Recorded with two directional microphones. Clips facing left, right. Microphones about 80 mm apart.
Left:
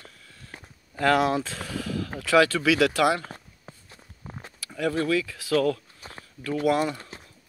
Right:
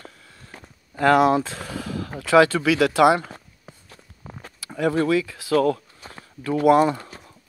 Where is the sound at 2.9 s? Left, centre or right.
Centre.